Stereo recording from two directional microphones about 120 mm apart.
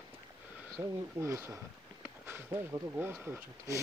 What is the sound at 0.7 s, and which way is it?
Speech, 20° right (ahead or behind).